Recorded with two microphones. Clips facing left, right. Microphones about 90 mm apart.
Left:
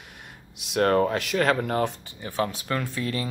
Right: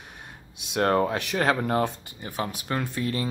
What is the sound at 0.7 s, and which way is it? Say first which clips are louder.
Speech: left 2 dB; 30° right (ahead or behind).